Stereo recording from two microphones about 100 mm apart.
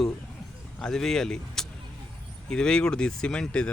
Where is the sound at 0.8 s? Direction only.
5° left (ahead or behind).